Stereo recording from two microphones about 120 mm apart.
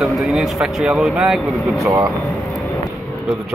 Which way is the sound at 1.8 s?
30° right (ahead or behind).